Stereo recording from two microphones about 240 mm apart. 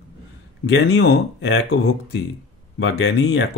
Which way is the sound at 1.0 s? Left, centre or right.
Left.